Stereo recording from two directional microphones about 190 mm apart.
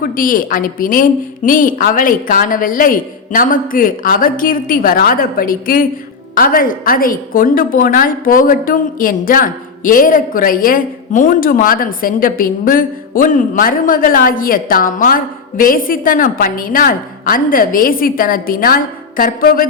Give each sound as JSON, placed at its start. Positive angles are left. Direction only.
{"t": 0.0, "sound": "a woman's voice", "side_deg": 45}